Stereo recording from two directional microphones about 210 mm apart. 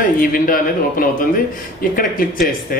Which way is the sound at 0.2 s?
40° left (ahead or behind).